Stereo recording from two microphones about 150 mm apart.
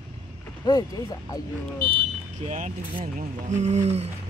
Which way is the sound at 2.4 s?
55° right (ahead or behind).